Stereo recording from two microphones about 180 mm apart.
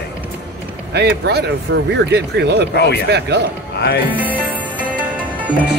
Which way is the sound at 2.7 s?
65° left (ahead or behind).